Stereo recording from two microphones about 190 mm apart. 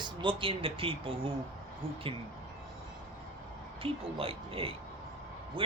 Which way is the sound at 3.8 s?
30° right (ahead or behind).